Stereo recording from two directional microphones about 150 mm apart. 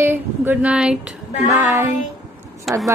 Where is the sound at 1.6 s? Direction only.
15° right (ahead or behind).